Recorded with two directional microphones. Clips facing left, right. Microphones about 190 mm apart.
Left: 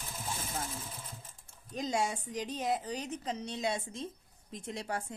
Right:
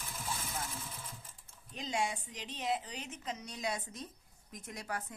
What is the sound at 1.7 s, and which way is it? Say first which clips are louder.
A woman's voice: left 4 dB; 40° left (ahead or behind).